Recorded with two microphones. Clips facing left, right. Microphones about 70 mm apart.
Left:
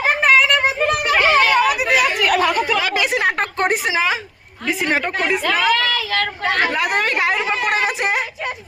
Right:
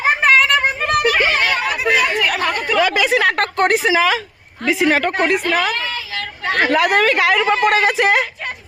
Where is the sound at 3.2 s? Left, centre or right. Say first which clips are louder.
Right 3 dB; right.